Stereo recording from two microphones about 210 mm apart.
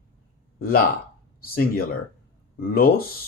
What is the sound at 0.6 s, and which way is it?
Speech, 45° left (ahead or behind).